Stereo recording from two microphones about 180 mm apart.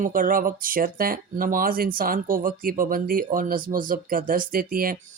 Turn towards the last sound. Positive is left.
turn(degrees=-50)  # may be behind; listen again after turning